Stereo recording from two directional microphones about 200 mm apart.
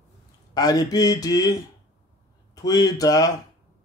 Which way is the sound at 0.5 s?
20° left (ahead or behind).